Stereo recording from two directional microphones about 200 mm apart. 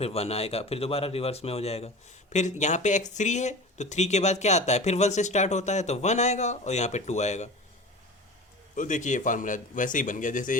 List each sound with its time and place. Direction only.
0.0 s speech: 30° left (ahead or behind)
8.7 s speech: 40° left (ahead or behind)